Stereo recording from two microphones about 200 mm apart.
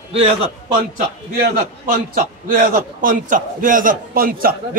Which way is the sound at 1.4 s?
45° right (ahead or behind).